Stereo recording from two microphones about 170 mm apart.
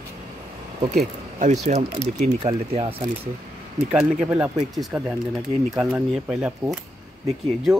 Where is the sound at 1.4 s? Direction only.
45° right (ahead or behind).